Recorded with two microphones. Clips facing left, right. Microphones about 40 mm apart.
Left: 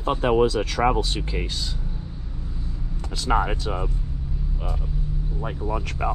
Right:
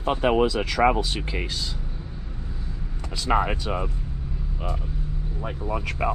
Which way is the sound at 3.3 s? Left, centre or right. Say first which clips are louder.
Even; right.